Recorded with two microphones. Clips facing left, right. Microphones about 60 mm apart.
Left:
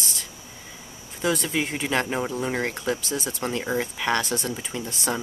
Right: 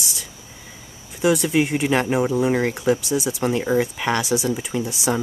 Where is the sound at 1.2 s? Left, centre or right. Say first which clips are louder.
Right 7 dB; centre.